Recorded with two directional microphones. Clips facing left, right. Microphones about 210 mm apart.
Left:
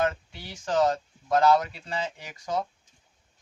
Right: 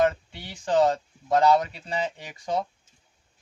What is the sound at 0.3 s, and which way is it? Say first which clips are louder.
A man's voice: right 4 dB; 25° right (ahead or behind).